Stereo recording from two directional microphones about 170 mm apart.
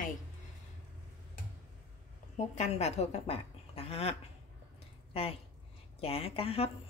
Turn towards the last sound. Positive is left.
turn(degrees=35)  # may be behind; listen again after turning